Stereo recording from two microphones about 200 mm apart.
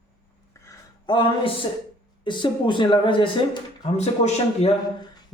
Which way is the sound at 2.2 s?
25° left (ahead or behind).